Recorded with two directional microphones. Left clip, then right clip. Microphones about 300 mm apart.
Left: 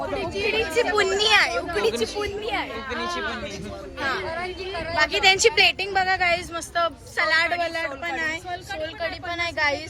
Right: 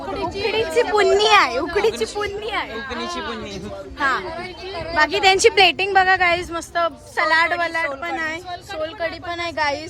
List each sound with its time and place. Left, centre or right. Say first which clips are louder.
0.2 s a woman's voice: right 4 dB; right
4.7 s a woman's voice: right 4 dB; right